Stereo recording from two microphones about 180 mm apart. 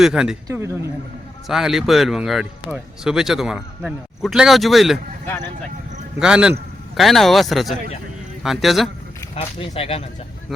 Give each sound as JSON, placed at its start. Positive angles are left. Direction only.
{"t": 0.0, "sound": "speech", "side_deg": -5}
{"t": 0.4, "sound": "speech", "side_deg": -15}
{"t": 1.5, "sound": "speech", "side_deg": 0}
{"t": 6.1, "sound": "speech", "side_deg": -5}
{"t": 9.3, "sound": "speech", "side_deg": 35}